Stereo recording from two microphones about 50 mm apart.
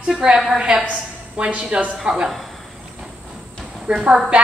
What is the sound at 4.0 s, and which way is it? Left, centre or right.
Speech, centre.